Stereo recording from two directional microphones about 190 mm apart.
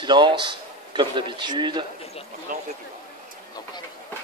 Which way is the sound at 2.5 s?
45° right (ahead or behind).